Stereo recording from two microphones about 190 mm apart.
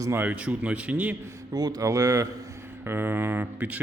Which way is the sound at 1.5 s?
20° right (ahead or behind).